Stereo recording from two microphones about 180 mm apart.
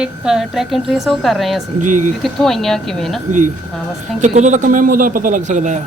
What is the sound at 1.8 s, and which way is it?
Speech, 45° right (ahead or behind).